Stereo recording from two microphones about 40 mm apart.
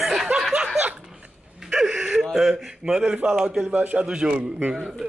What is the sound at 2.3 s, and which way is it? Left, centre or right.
Speech, centre.